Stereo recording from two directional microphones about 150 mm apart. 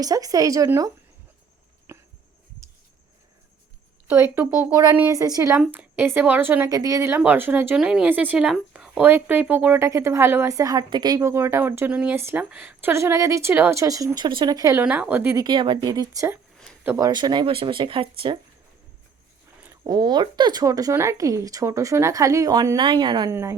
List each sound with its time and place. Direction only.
0.0 s speech: 25° right (ahead or behind)
1.9 s a sound: 15° right (ahead or behind)
4.1 s a woman's voice: 15° right (ahead or behind)
14.8 s a woman's voice: 10° right (ahead or behind)
15.4 s speech: 30° right (ahead or behind)
16.8 s speech: 15° right (ahead or behind)
17.1 s speech: 30° right (ahead or behind)
19.9 s speech: 30° right (ahead or behind)
23.3 s a woman's voice: 15° right (ahead or behind)